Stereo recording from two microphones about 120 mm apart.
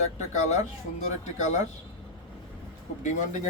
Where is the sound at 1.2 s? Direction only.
75° left (ahead or behind).